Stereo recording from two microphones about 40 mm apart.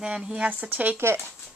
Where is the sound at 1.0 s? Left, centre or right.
Right.